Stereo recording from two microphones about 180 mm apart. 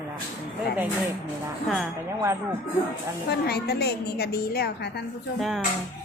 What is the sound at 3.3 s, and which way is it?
A woman's voice, 60° left (ahead or behind).